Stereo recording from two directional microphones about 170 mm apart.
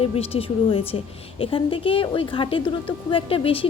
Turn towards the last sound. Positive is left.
turn(degrees=30)  # may be behind; listen again after turning